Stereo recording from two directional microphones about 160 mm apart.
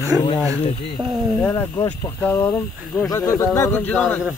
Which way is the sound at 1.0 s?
30° right (ahead or behind).